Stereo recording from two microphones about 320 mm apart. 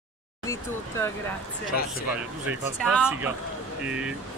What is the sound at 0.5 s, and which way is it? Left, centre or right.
Speech, centre.